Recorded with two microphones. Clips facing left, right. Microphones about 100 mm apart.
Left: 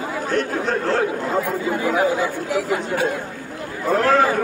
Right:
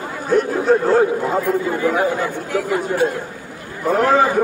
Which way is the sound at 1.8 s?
5° left (ahead or behind).